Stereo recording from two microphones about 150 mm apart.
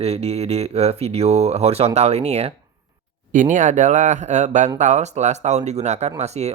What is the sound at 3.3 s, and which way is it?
Speech, 55° right (ahead or behind).